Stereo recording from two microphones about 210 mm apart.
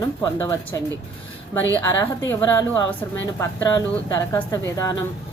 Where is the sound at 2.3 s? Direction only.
20° left (ahead or behind).